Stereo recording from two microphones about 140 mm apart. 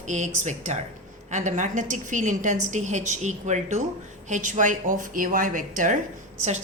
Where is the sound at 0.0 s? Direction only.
60° right (ahead or behind).